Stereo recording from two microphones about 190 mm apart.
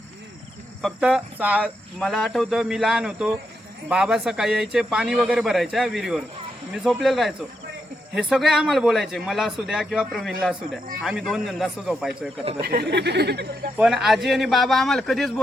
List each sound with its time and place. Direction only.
0.8 s speech: 5° right (ahead or behind)
12.6 s speech: 55° right (ahead or behind)
13.7 s speech: 5° right (ahead or behind)